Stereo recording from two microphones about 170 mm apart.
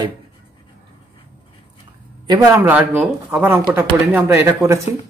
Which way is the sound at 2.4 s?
10° right (ahead or behind).